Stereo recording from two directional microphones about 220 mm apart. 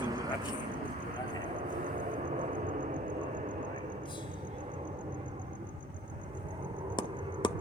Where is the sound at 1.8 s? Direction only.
35° right (ahead or behind).